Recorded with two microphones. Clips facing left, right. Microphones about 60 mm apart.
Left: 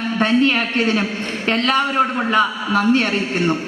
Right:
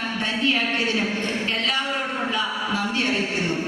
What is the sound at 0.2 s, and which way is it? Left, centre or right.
A woman's voice, left.